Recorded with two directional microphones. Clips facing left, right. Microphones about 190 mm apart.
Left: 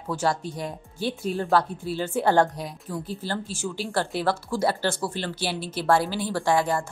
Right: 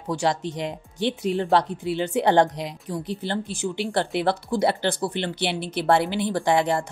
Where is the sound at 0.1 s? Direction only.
15° right (ahead or behind).